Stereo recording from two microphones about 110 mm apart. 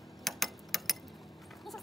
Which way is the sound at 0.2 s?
Centre (ahead or behind).